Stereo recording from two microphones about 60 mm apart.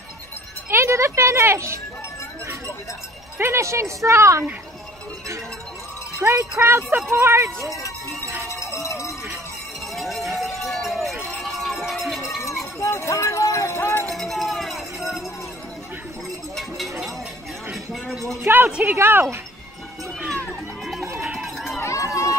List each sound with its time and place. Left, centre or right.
0.7 s speech: right
3.3 s speech: right
6.2 s speech: right
8.5 s cowbell: left
9.9 s run: centre
11.2 s music: centre
12.8 s a sound: left
14.0 s a sound: centre
16.5 s a sound: centre
18.4 s a woman's voice: right
20.8 s music: centre
21.4 s run: centre
21.8 s run: left